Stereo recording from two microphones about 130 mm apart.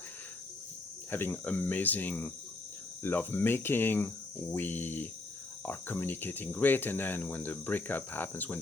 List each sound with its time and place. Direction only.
1.1 s speech: 15° left (ahead or behind)